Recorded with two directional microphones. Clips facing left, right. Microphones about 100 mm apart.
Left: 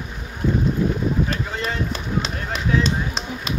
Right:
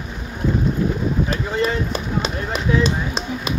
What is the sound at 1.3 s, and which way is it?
Run, 5° right (ahead or behind).